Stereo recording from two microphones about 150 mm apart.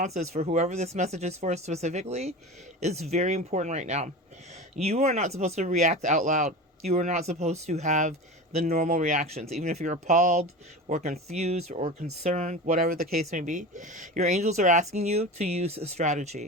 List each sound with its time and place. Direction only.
0.0 s speech: 50° right (ahead or behind)